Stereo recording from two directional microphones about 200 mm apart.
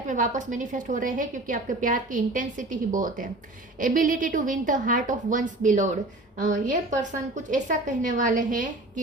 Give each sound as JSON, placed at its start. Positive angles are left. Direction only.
{"t": 0.1, "sound": "a woman's voice", "side_deg": -40}